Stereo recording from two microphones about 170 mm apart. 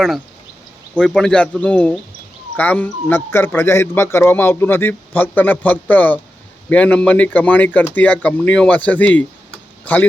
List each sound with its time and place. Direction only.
0.9 s speech: 5° left (ahead or behind)